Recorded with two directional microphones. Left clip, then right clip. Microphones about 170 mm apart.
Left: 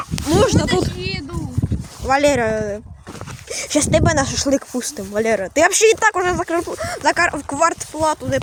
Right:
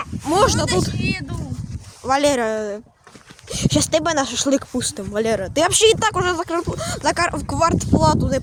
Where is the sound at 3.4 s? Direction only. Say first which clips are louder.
Left 1 dB; 5° left (ahead or behind).